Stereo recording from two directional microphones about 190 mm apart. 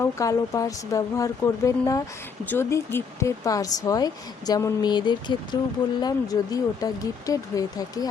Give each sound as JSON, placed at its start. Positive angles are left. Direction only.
{"t": 0.0, "sound": "speech", "side_deg": 15}